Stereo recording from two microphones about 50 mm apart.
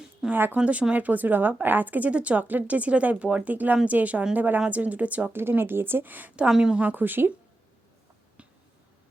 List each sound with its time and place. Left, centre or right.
0.3 s a woman's voice: right
0.5 s a woman's voice: right
5.3 s speech: right
6.5 s a woman's voice: centre
6.7 s a woman's voice: right